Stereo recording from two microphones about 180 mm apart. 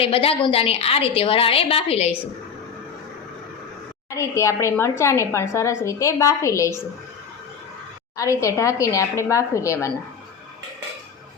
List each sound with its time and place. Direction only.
0.0 s a woman's voice: 30° left (ahead or behind)
4.1 s a woman's voice: 15° left (ahead or behind)
8.1 s a woman's voice: 15° left (ahead or behind)